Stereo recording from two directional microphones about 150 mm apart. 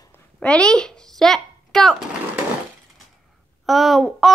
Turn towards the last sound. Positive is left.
turn(degrees=0)  # may be behind; listen again after turning